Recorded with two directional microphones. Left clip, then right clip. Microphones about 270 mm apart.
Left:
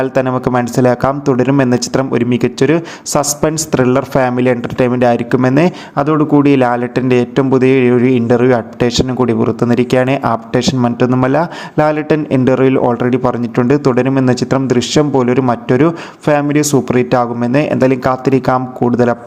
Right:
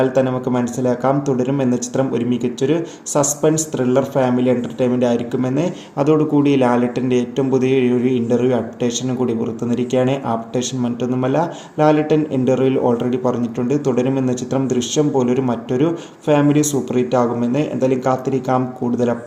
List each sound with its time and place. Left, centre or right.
0.0 s speech: left